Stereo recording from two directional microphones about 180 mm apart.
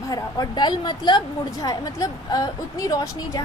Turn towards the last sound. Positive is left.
turn(degrees=20)  # may be behind; listen again after turning